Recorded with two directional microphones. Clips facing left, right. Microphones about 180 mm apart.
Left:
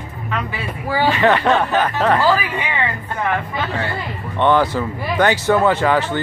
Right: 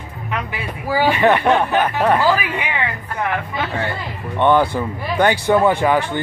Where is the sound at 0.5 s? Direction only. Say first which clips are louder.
Right 4 dB; 10° right (ahead or behind).